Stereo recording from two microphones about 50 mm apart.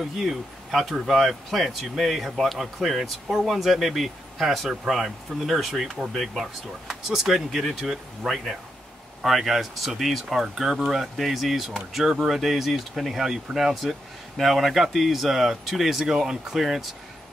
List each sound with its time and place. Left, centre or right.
0.2 s speech: centre